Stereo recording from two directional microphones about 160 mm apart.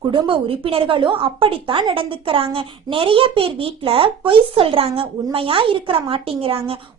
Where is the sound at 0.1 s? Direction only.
35° right (ahead or behind).